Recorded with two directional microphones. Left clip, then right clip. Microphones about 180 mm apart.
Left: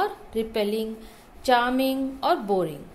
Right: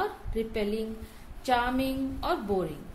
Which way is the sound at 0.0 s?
15° left (ahead or behind).